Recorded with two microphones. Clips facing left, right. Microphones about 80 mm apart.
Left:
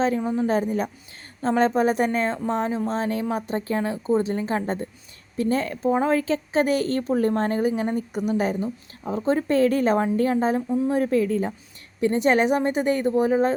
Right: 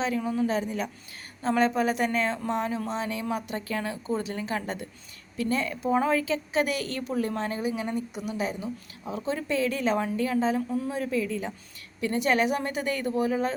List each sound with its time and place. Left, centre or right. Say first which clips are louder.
0.0 s a woman's voice: left 4 dB; left